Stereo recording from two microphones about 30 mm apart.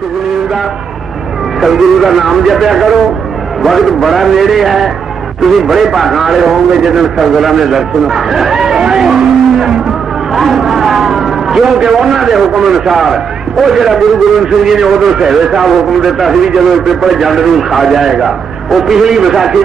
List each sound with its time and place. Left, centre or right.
1.6 s a man's voice: centre
8.6 s a sound: right
9.0 s vehicle: centre
10.3 s vehicle: centre
11.8 s a man's voice: centre